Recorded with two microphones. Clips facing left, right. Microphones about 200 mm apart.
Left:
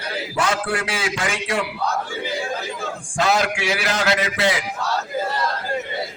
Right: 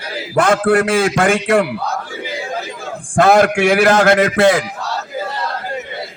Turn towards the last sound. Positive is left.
turn(degrees=-55)  # may be behind; listen again after turning